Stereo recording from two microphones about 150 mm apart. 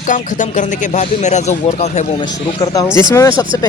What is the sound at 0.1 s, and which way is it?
Speech, 55° left (ahead or behind).